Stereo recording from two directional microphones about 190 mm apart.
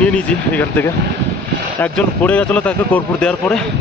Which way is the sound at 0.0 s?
5° left (ahead or behind).